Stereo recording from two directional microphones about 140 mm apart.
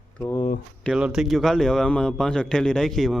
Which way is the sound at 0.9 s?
5° right (ahead or behind).